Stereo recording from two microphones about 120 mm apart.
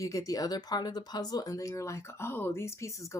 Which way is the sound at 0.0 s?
30° left (ahead or behind).